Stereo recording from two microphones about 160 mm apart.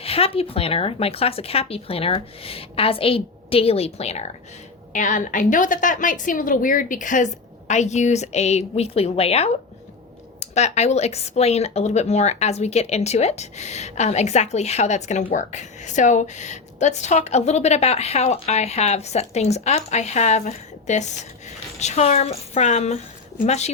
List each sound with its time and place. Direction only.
0.0 s speech: 35° left (ahead or behind)
4.9 s a woman's voice: 50° left (ahead or behind)